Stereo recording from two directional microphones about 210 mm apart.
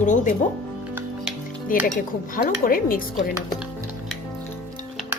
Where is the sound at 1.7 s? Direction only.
40° left (ahead or behind).